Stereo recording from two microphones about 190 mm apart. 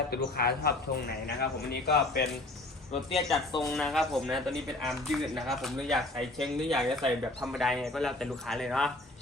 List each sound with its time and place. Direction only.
0.1 s a man's voice: 55° left (ahead or behind)
2.9 s speech: centre (ahead or behind)